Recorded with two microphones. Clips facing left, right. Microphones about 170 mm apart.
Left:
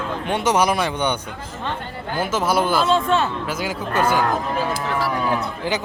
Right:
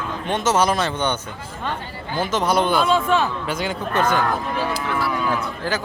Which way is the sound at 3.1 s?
10° right (ahead or behind).